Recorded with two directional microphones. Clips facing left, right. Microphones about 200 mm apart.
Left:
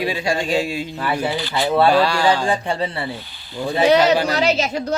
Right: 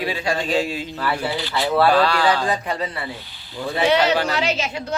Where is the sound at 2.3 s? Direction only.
30° left (ahead or behind).